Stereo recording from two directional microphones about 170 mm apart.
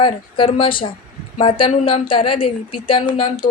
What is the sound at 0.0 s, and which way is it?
A woman's voice, 30° left (ahead or behind).